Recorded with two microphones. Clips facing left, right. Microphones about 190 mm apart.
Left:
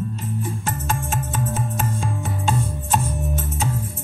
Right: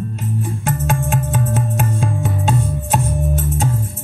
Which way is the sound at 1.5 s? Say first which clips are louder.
Right 5 dB; 65° right (ahead or behind).